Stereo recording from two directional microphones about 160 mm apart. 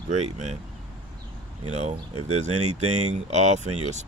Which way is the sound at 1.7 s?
45° right (ahead or behind).